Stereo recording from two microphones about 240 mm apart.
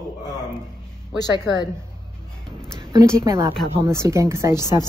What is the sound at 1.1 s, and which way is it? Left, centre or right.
Speech, centre.